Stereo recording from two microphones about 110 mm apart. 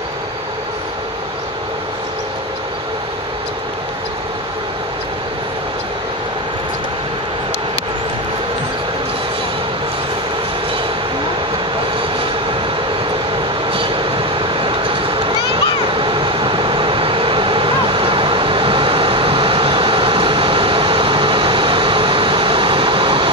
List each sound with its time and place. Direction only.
13.7 s vehicle: 55° right (ahead or behind)